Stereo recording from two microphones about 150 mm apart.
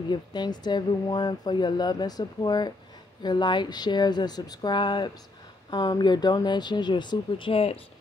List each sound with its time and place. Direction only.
0.1 s speech: 30° left (ahead or behind)